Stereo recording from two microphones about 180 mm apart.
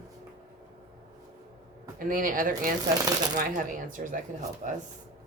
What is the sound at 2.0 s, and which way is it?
Speech, 50° right (ahead or behind).